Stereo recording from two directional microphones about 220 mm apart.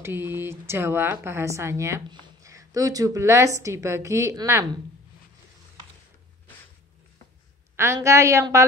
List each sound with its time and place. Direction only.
0.0 s speech: 10° right (ahead or behind)
7.7 s speech: 10° right (ahead or behind)